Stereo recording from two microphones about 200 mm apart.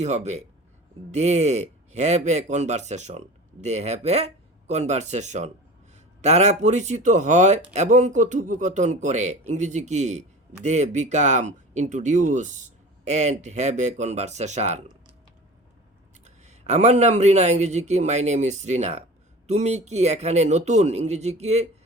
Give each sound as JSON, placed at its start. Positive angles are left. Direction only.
{"t": 0.0, "sound": "speech", "side_deg": -35}
{"t": 16.2, "sound": "speech", "side_deg": -35}